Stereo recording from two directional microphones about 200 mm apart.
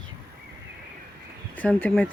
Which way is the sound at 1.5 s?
10° left (ahead or behind).